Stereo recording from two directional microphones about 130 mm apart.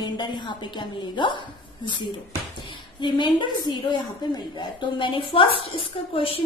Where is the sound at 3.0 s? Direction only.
35° left (ahead or behind).